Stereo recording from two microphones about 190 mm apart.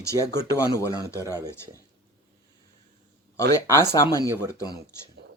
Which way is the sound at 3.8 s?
15° left (ahead or behind).